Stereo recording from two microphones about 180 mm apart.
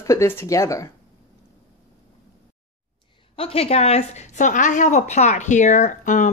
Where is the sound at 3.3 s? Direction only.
30° left (ahead or behind).